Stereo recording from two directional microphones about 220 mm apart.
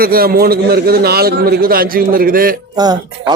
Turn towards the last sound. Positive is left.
turn(degrees=-15)  # may be behind; listen again after turning